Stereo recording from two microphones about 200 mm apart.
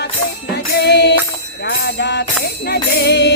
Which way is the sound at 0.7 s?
55° left (ahead or behind).